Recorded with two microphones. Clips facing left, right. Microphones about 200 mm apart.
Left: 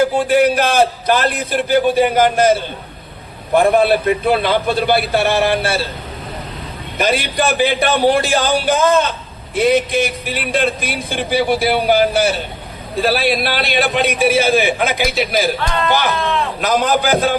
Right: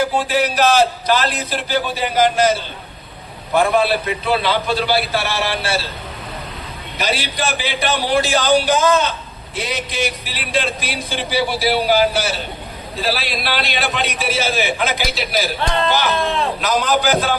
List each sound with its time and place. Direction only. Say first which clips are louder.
0.2 s speech: left 4 dB; 55° left (ahead or behind)
7.0 s a man's voice: left 5 dB; 55° left (ahead or behind)